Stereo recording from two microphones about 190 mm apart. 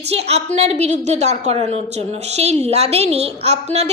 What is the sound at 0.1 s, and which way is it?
A woman's voice, 35° right (ahead or behind).